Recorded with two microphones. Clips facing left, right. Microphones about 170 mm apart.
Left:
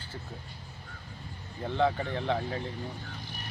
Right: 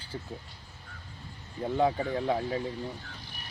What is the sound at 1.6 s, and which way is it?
Speech, 10° right (ahead or behind).